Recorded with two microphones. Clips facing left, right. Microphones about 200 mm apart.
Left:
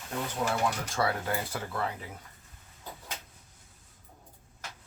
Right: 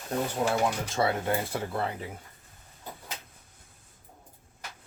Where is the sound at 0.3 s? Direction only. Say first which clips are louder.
Right 2 dB; 25° right (ahead or behind).